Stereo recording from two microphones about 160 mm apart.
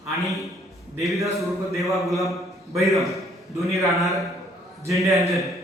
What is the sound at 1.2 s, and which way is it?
Speech, 20° right (ahead or behind).